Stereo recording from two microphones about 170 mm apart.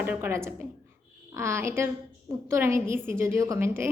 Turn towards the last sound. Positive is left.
turn(degrees=-15)  # may be behind; listen again after turning